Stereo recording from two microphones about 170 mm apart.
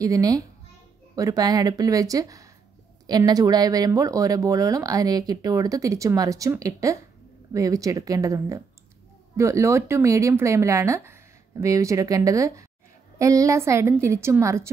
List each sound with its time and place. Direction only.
0.0 s speech: 20° right (ahead or behind)